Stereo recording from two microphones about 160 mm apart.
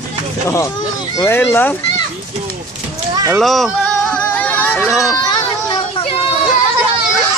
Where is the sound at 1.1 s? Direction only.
15° left (ahead or behind).